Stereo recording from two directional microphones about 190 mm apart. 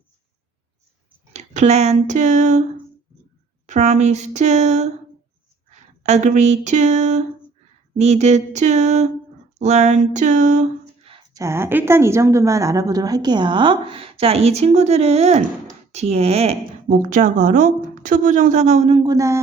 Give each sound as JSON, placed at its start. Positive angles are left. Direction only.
{"t": 1.3, "sound": "speech", "side_deg": -35}
{"t": 3.7, "sound": "a woman's voice", "side_deg": -35}
{"t": 11.3, "sound": "a woman's voice", "side_deg": -15}